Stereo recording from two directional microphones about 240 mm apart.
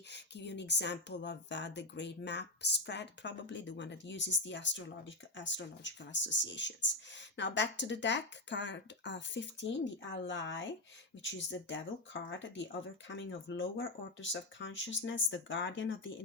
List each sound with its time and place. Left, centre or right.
0.1 s speech: left